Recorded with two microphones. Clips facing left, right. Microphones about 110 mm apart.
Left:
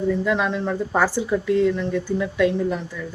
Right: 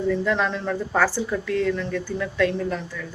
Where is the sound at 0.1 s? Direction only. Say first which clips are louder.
Even; 10° left (ahead or behind).